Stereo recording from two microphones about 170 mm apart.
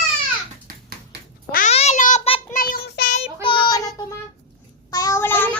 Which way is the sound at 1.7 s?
40° left (ahead or behind).